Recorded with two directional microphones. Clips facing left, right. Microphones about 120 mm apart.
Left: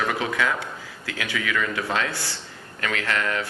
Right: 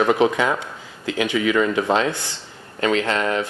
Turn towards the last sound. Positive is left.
turn(degrees=-25)  # may be behind; listen again after turning